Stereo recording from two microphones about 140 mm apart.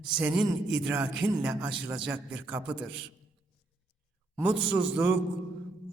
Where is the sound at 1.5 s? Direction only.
30° right (ahead or behind).